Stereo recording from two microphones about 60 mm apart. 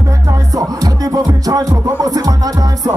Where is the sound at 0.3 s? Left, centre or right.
Right.